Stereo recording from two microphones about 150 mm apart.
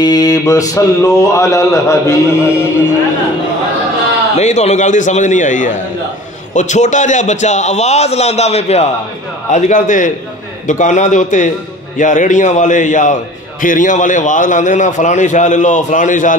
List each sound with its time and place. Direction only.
0.0 s speech: 25° left (ahead or behind)
4.4 s a man's voice: 50° left (ahead or behind)